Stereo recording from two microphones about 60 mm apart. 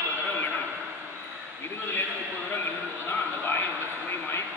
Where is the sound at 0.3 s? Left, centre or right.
Left.